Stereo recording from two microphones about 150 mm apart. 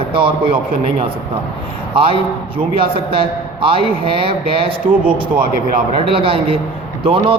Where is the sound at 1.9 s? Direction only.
35° right (ahead or behind).